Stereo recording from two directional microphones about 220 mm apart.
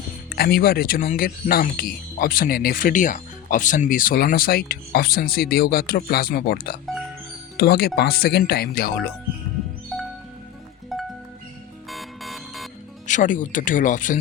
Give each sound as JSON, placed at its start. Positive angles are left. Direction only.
{"t": 0.3, "sound": "speech", "side_deg": 45}
{"t": 9.9, "sound": "music", "side_deg": 0}
{"t": 13.1, "sound": "speech", "side_deg": 35}